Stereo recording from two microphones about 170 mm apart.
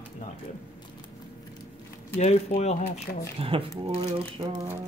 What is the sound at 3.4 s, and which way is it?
Speech, 35° right (ahead or behind).